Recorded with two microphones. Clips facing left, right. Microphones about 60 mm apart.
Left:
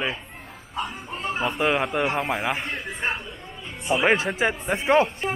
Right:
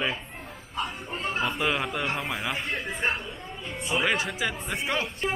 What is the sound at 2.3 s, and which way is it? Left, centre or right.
Speech, left.